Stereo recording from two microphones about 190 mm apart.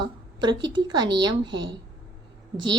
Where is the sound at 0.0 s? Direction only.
25° right (ahead or behind).